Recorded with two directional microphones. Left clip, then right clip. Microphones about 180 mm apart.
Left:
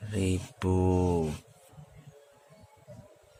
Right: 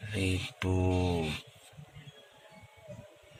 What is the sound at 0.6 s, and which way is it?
Speech, 35° left (ahead or behind).